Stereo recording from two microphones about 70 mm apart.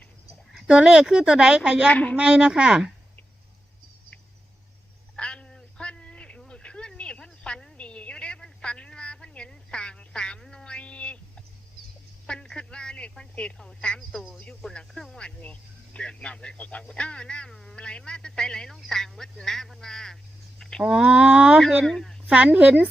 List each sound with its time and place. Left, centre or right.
0.7 s speech: centre
1.9 s a woman's voice: left
2.1 s speech: centre
5.1 s a sound: centre
12.2 s a sound: centre
13.6 s speech: centre
20.6 s a sound: centre
20.8 s speech: centre
21.6 s speech: centre
22.3 s speech: centre